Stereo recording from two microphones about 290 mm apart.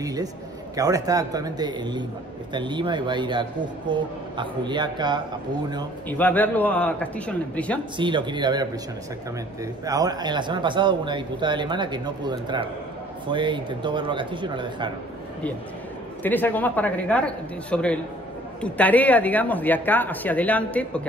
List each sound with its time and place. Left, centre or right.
0.0 s speech: centre
6.0 s speech: centre
8.0 s speech: centre
9.8 s speech: centre
16.2 s speech: centre